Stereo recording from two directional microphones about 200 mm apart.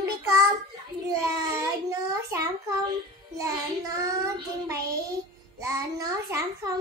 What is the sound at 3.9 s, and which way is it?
A child's voice, 15° right (ahead or behind).